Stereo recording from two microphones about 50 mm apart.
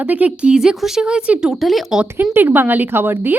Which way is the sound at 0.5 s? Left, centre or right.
Centre.